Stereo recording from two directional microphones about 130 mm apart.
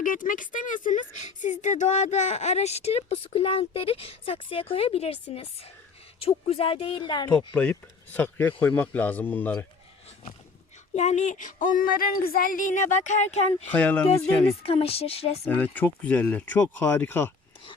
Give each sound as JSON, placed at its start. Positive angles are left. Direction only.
{"t": 0.0, "sound": "speech", "side_deg": 90}
{"t": 7.5, "sound": "speech", "side_deg": 10}
{"t": 10.9, "sound": "speech", "side_deg": 60}
{"t": 13.7, "sound": "speech", "side_deg": 10}
{"t": 14.6, "sound": "speech", "side_deg": 50}
{"t": 15.4, "sound": "speech", "side_deg": 15}